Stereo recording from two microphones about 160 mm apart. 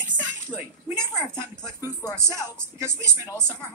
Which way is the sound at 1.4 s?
15° right (ahead or behind).